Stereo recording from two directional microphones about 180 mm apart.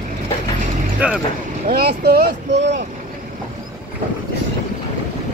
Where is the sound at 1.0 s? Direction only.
10° right (ahead or behind).